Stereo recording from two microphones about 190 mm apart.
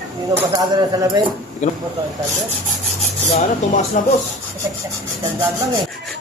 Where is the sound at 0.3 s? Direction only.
15° right (ahead or behind).